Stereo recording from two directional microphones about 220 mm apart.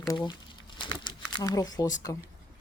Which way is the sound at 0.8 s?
20° left (ahead or behind).